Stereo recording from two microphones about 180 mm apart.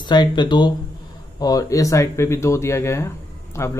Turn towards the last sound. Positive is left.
turn(degrees=15)  # may be behind; listen again after turning